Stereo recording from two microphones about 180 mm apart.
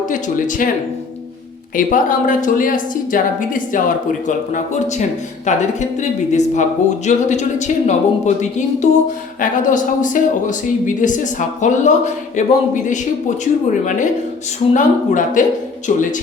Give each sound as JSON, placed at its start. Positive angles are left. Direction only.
{"t": 0.0, "sound": "speech", "side_deg": 45}
{"t": 1.7, "sound": "speech", "side_deg": 45}